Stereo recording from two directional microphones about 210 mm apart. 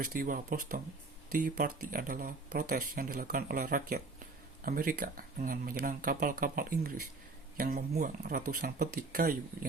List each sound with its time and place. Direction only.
0.0 s speech: 40° right (ahead or behind)